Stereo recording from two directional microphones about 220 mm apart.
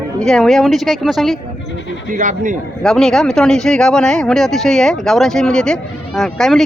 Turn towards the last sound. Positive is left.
turn(degrees=0)  # may be behind; listen again after turning